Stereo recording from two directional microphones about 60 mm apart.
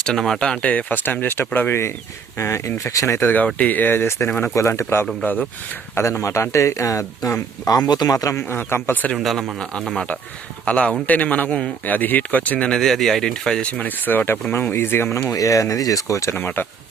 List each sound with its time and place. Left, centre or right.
0.0 s speech: centre; by 1.8 s left
2.4 s speech: left
3.2 s a man's voice: left
5.2 s speech: left
5.9 s speech: left
7.7 s speech: left
8.4 s speech: left
9.2 s speech: centre
10.7 s speech: centre
12.8 s speech: centre
13.7 s speech: left
15.1 s speech: left
16.4 s speech: left